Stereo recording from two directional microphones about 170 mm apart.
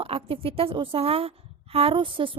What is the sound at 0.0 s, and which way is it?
A woman's voice, 35° right (ahead or behind).